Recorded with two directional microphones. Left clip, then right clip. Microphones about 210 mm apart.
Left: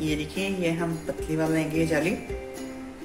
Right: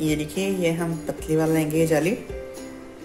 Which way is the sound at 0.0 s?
25° right (ahead or behind).